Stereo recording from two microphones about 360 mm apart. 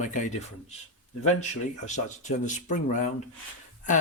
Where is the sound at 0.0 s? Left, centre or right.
Centre.